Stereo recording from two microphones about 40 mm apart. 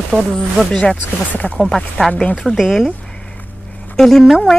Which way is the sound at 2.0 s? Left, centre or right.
Left.